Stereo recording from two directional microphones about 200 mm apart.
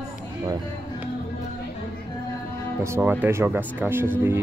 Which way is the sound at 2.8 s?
15° right (ahead or behind).